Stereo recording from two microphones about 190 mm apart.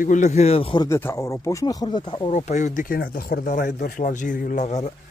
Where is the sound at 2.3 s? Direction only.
40° left (ahead or behind).